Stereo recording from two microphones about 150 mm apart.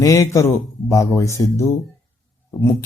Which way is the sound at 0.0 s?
20° left (ahead or behind).